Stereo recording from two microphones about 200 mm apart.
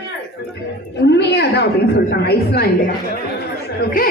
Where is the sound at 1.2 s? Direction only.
60° left (ahead or behind).